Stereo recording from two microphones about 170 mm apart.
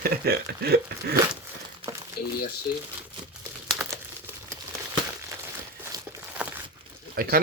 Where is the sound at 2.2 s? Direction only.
65° left (ahead or behind).